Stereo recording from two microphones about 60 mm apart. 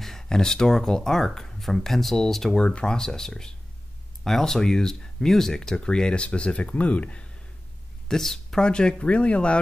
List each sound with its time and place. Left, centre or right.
0.0 s speech: centre
8.1 s speech: centre